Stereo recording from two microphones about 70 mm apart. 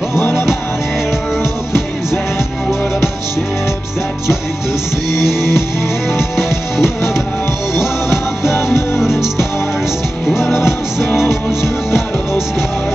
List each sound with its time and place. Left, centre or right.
0.1 s music: left
5.2 s music: centre
9.0 s music: centre
11.2 s music: left